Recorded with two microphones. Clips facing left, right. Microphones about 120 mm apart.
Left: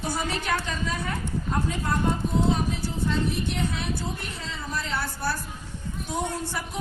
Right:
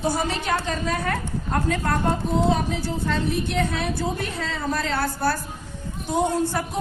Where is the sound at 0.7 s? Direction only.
60° right (ahead or behind); by 2.1 s 80° right.